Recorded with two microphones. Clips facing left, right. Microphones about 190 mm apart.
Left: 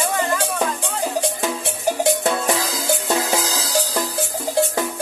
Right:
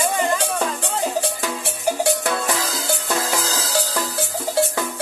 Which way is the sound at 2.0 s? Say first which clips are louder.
Left 4 dB; 20° left (ahead or behind).